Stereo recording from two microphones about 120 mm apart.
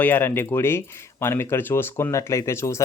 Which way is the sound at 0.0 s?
15° left (ahead or behind).